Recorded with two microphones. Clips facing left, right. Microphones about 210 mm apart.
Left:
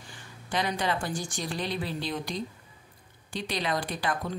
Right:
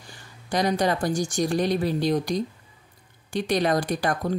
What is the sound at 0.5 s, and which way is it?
Speech, 40° right (ahead or behind).